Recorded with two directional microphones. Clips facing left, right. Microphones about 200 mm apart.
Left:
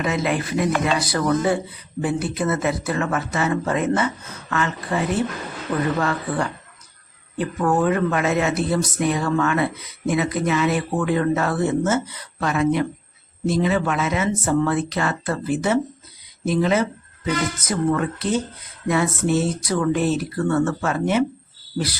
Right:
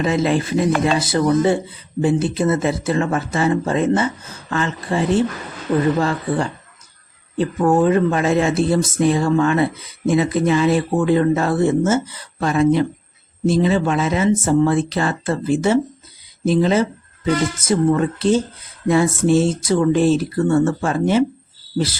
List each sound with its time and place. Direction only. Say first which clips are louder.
0.0 s speech: right 5 dB; 30° right (ahead or behind)